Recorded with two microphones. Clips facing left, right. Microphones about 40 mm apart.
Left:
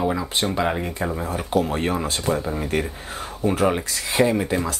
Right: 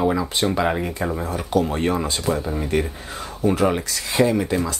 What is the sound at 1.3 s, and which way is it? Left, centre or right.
Speech, left.